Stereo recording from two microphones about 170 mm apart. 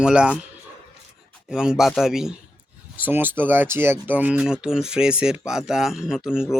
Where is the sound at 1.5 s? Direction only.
5° right (ahead or behind).